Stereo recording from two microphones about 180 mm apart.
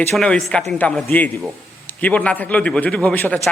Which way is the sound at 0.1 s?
5° left (ahead or behind).